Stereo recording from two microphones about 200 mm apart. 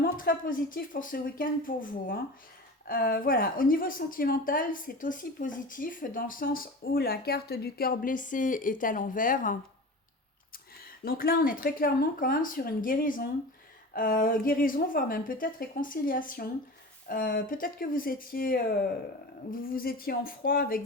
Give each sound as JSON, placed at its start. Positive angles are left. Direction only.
{"t": 0.0, "sound": "a woman's voice", "side_deg": 45}
{"t": 10.8, "sound": "a woman's voice", "side_deg": 50}